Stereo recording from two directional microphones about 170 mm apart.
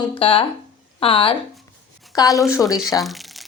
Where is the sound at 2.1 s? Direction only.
20° left (ahead or behind).